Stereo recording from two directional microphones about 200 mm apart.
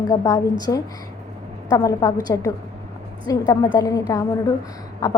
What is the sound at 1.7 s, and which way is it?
Speech, 20° left (ahead or behind).